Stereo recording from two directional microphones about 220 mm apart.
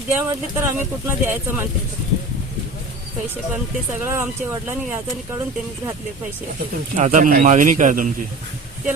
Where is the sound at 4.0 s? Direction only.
10° right (ahead or behind).